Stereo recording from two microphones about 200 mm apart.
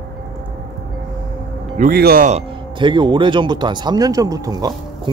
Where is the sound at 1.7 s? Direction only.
50° right (ahead or behind).